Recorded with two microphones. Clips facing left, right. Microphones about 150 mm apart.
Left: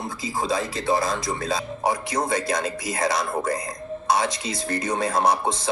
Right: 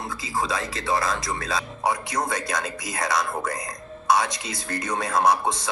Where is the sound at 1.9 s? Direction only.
30° left (ahead or behind).